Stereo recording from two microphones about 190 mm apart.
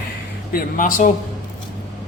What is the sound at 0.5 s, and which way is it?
Speech, 50° left (ahead or behind).